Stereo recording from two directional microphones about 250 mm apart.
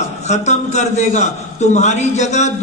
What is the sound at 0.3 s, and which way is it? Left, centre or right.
A man's voice, left.